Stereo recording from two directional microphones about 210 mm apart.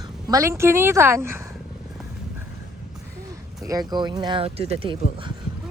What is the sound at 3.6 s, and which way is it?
Speech, 15° right (ahead or behind).